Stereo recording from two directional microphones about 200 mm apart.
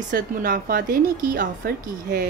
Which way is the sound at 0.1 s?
45° right (ahead or behind).